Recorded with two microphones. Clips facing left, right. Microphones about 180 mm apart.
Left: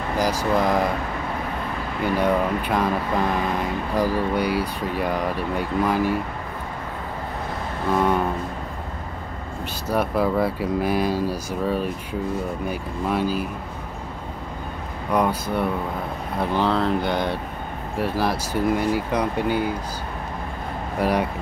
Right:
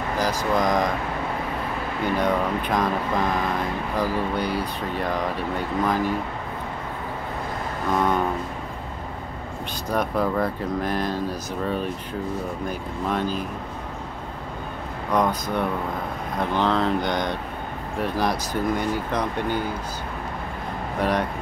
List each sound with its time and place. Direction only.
0.2 s speech: 10° left (ahead or behind)
2.1 s speech: 10° left (ahead or behind)
3.9 s speech: 10° left (ahead or behind)
9.8 s speech: 10° left (ahead or behind)
15.1 s speech: 10° left (ahead or behind)
21.0 s speech: 10° left (ahead or behind)